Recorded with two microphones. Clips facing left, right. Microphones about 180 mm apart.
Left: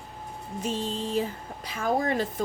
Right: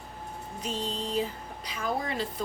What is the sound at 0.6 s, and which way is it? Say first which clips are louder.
A woman's voice: left 4 dB; 50° left (ahead or behind).